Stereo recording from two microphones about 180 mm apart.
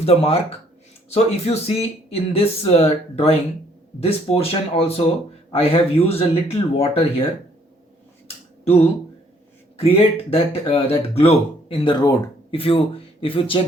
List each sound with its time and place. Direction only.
0.0 s speech: 35° left (ahead or behind)
8.6 s a sound: 35° left (ahead or behind)
9.7 s speech: 30° left (ahead or behind)